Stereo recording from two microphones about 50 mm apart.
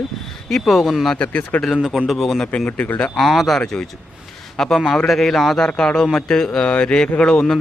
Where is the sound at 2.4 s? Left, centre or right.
Left.